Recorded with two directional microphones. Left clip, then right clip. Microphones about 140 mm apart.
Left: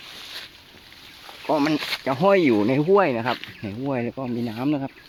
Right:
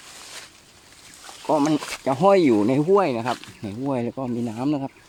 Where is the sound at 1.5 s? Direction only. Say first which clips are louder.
Right 1 dB; 25° right (ahead or behind).